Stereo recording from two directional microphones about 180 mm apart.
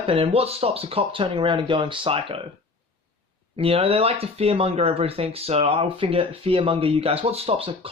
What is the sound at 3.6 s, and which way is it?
Speech, 30° right (ahead or behind).